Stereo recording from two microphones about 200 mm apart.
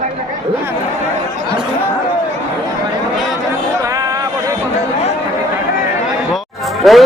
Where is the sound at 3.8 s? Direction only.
15° right (ahead or behind).